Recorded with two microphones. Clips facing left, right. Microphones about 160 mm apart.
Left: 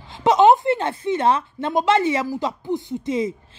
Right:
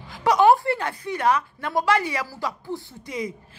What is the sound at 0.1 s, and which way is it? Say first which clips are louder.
A woman's voice: left 3 dB; 25° left (ahead or behind).